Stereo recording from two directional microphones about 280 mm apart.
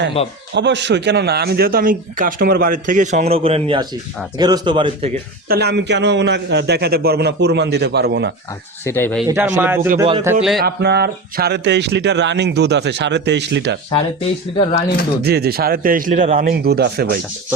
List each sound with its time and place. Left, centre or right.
0.2 s speech: left
0.5 s a man's voice: right; by 5.1 s centre
5.5 s a man's voice: right
8.8 s speech: centre
9.2 s a man's voice: centre
10.6 s a man's voice: right
14.5 s speech: centre
15.2 s a man's voice: right